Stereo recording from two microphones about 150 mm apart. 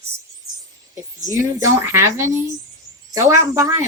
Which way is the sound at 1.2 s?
20° right (ahead or behind).